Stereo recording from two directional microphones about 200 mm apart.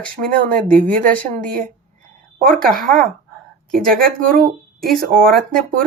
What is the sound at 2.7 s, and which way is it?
Speech, 45° right (ahead or behind).